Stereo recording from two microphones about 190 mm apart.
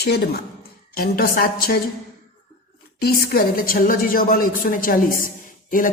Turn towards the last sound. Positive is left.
turn(degrees=45)  # may be behind; listen again after turning